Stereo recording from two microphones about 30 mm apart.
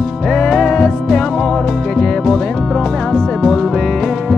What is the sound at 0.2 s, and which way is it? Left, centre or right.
Music, centre.